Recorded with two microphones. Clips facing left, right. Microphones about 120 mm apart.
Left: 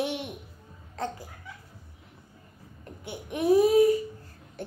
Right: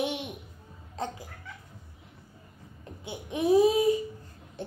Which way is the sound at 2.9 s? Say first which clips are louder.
Even; 20° right (ahead or behind).